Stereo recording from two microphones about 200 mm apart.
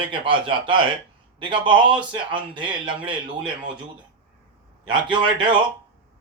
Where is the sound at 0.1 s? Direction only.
25° right (ahead or behind).